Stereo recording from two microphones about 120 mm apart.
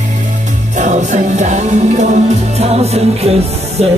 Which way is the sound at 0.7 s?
85° right.